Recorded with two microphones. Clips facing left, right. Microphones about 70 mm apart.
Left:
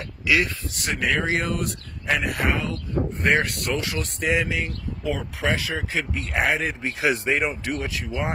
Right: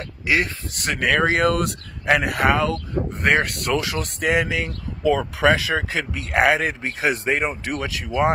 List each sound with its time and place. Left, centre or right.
0.7 s speech: right
1.5 s speech: right
3.7 s speech: right
6.8 s speech: right
7.7 s speech: right